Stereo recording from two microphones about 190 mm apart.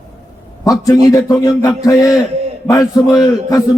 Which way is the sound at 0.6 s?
20° left (ahead or behind).